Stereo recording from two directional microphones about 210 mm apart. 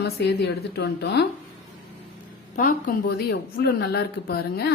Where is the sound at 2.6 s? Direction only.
40° left (ahead or behind).